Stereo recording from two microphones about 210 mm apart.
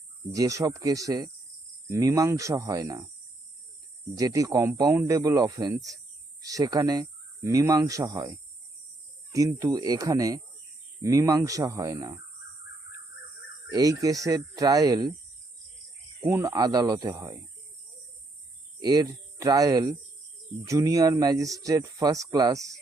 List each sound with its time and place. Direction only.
0.3 s speech: 15° right (ahead or behind)
4.1 s speech: 15° right (ahead or behind)
9.3 s speech: 15° right (ahead or behind)
13.7 s speech: 15° right (ahead or behind)
16.3 s speech: 15° right (ahead or behind)
18.8 s speech: 20° right (ahead or behind)